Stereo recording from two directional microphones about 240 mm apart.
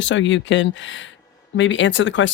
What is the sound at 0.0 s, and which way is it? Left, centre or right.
Speech, left.